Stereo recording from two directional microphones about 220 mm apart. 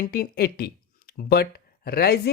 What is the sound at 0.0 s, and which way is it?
Speech, 40° left (ahead or behind).